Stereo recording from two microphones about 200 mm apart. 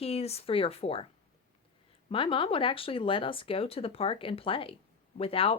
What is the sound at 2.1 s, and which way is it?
Speech, 25° left (ahead or behind).